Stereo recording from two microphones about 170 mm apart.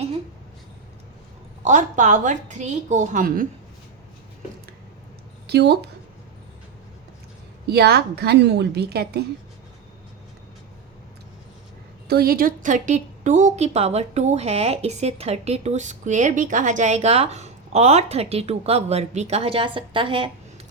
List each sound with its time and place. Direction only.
1.6 s a woman's voice: 45° right (ahead or behind)
5.5 s speech: 75° right (ahead or behind)
7.7 s a woman's voice: 70° right (ahead or behind)
12.0 s a woman's voice: 65° right (ahead or behind); by 20.3 s 30° right (ahead or behind)